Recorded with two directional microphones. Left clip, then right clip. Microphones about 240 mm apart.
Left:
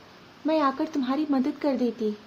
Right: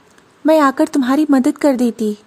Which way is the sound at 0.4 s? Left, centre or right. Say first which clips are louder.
Right 12 dB; right.